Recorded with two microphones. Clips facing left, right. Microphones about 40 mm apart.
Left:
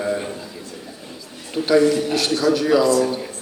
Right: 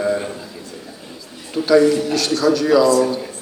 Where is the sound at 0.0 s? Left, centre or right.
Centre.